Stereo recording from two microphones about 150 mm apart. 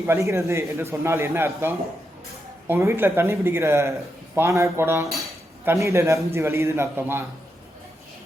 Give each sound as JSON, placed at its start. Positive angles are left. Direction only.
{"t": 0.0, "sound": "a man's voice", "side_deg": -20}